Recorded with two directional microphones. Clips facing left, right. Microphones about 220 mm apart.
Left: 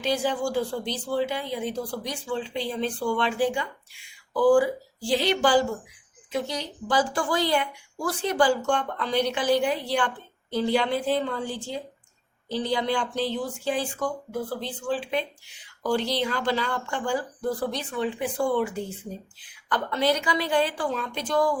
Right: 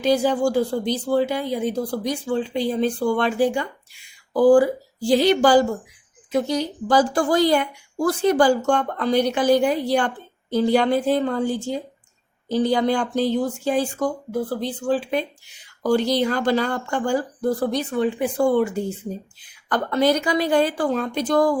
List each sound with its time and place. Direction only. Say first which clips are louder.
0.0 s speech: right 7 dB; 40° right (ahead or behind)